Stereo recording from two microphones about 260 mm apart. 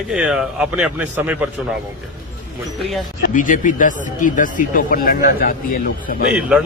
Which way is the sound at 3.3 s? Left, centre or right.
Left.